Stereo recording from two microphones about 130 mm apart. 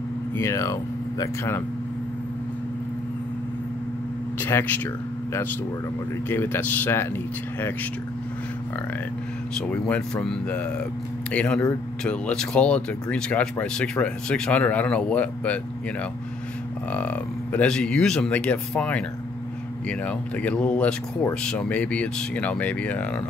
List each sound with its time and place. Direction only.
0.4 s speech: 20° left (ahead or behind)
4.4 s speech: 15° left (ahead or behind)
6.2 s speech: 15° left (ahead or behind)
9.7 s speech: 10° left (ahead or behind)
16.9 s speech: 10° left (ahead or behind)